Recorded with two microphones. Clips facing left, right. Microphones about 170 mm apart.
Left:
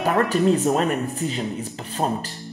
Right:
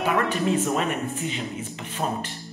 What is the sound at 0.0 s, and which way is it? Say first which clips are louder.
Speech: left 4 dB; 40° left (ahead or behind).